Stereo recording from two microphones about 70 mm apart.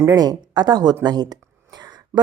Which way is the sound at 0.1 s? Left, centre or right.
Right.